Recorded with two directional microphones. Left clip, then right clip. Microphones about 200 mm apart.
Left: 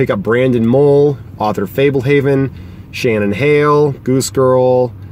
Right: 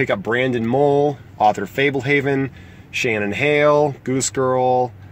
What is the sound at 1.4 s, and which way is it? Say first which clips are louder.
Speech: left 2 dB; 5° right (ahead or behind).